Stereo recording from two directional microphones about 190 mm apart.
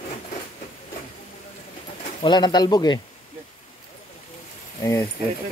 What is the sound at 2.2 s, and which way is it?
Speech, 20° left (ahead or behind).